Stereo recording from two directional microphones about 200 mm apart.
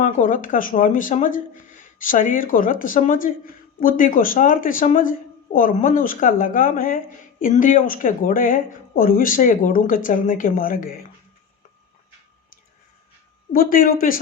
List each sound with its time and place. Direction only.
0.0 s speech: 40° left (ahead or behind)
13.5 s speech: 45° left (ahead or behind)